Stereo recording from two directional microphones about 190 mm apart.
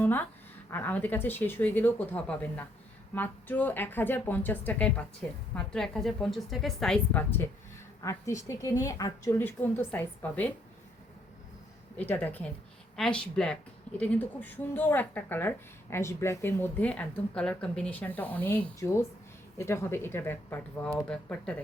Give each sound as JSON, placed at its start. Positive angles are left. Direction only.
{"t": 0.0, "sound": "a sound", "side_deg": 10}
{"t": 0.7, "sound": "a woman's voice", "side_deg": 10}
{"t": 11.9, "sound": "a woman's voice", "side_deg": 10}